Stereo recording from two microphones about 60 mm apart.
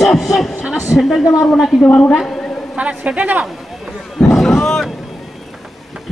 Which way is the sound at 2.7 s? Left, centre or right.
Right.